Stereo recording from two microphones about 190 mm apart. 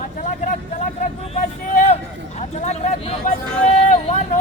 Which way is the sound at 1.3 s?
40° left (ahead or behind).